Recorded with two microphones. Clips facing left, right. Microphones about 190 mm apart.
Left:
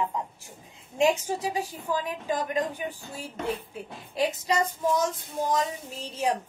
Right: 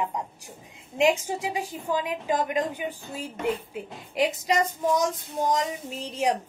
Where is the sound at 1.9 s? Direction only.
15° right (ahead or behind).